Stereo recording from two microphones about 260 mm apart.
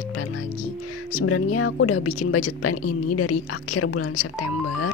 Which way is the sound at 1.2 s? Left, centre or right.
Left.